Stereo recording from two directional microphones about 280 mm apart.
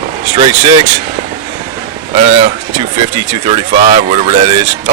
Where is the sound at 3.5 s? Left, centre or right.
Right.